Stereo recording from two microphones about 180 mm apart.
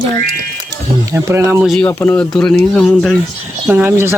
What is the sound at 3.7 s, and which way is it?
Speech, 10° right (ahead or behind).